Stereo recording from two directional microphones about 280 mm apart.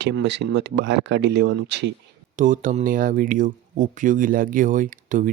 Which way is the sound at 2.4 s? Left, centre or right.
Right.